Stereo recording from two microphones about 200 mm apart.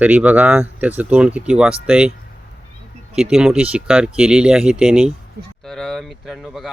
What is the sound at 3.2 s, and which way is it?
Speech, 5° right (ahead or behind).